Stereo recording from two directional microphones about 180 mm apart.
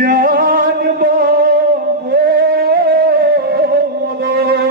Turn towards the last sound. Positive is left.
turn(degrees=-65)  # may be behind; listen again after turning